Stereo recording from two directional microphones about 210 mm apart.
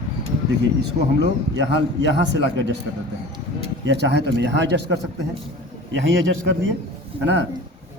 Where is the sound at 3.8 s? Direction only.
55° right (ahead or behind).